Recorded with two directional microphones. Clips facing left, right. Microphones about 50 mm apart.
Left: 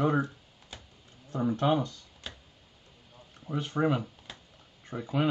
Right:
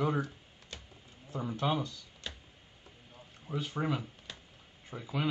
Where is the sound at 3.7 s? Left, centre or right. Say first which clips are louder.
Left 8 dB; left.